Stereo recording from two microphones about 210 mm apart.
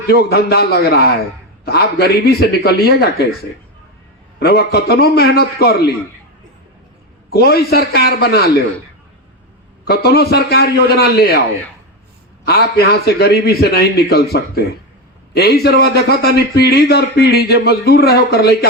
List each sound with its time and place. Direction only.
0.1 s a man's voice: 50° left (ahead or behind)
4.4 s a man's voice: 50° left (ahead or behind)
7.3 s a man's voice: 50° left (ahead or behind)
9.8 s a man's voice: 50° left (ahead or behind)
12.5 s a man's voice: 50° left (ahead or behind)